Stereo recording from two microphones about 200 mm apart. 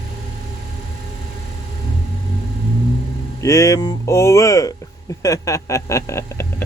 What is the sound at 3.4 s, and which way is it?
Speech, 15° left (ahead or behind).